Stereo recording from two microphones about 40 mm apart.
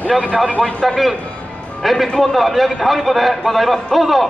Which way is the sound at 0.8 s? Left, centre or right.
Centre.